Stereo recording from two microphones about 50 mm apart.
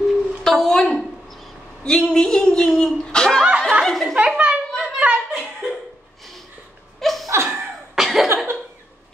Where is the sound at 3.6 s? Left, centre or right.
Centre.